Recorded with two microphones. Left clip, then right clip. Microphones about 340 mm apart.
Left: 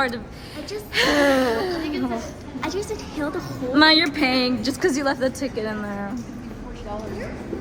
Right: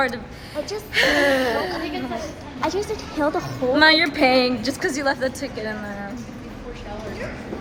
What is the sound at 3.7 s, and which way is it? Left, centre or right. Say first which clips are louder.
A woman's voice: even; centre.